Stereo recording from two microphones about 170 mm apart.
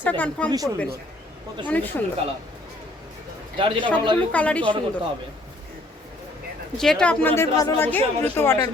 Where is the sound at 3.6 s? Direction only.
30° right (ahead or behind).